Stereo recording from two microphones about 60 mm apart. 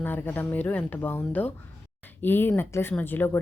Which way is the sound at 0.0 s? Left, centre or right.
Left.